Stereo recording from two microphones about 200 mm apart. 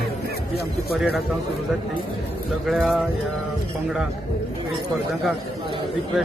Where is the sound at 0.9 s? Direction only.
Centre (ahead or behind).